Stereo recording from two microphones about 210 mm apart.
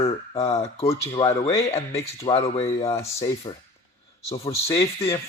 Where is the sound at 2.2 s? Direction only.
25° left (ahead or behind).